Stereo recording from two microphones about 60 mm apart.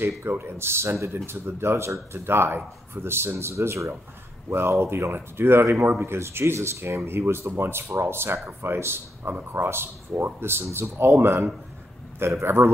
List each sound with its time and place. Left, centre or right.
0.2 s speech: right
12.2 s speech: right